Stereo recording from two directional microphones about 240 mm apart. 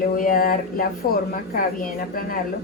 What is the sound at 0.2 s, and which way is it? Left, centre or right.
A woman's voice, left.